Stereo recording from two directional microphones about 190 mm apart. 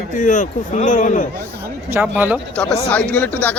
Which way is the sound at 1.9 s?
10° right (ahead or behind).